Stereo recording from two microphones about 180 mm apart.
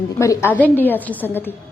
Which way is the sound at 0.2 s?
15° left (ahead or behind).